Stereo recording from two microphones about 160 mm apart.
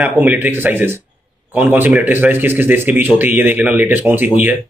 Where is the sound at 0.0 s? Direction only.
10° right (ahead or behind).